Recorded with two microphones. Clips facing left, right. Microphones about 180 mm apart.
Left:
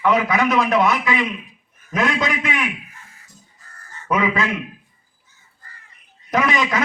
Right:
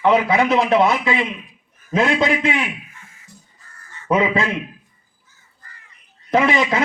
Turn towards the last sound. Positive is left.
turn(degrees=-30)  # may be behind; listen again after turning